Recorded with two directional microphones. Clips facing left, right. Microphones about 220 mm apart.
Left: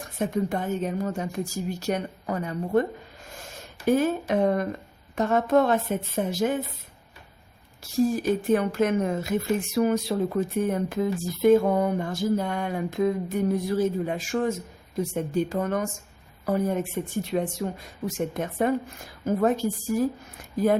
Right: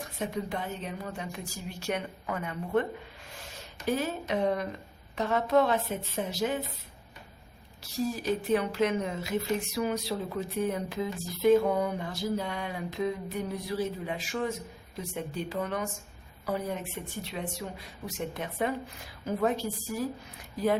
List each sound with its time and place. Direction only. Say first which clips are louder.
0.2 s a woman's voice: left 7 dB; 45° left (ahead or behind)
3.3 s a woman's voice: left 3 dB; 50° left (ahead or behind)
7.9 s a woman's voice: left 7 dB; 50° left (ahead or behind)